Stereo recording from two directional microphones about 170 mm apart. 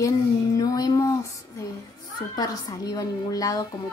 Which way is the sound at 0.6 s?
20° left (ahead or behind).